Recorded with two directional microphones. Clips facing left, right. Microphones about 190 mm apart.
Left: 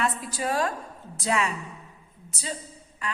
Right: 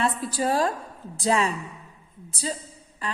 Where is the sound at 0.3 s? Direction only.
30° right (ahead or behind).